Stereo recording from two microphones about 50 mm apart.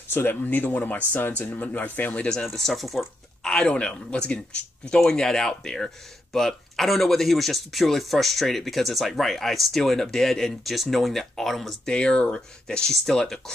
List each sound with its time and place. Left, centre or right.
0.1 s speech: left
0.4 s speech: left
2.4 s speech: centre
3.4 s speech: centre
11.8 s speech: centre